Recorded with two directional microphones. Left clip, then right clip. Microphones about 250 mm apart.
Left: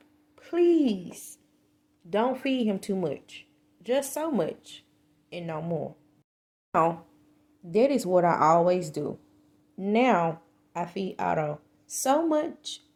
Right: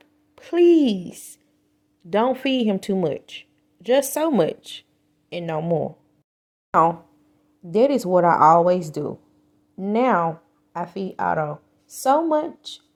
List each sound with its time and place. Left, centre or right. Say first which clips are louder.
0.0 s a sound: right 7 dB; right
2.0 s speech: right 6 dB; right
7.7 s speech: right 5 dB; right